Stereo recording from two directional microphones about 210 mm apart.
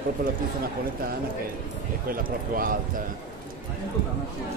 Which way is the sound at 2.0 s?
40° right (ahead or behind).